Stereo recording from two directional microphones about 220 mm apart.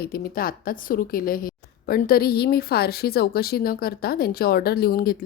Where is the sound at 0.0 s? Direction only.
40° left (ahead or behind).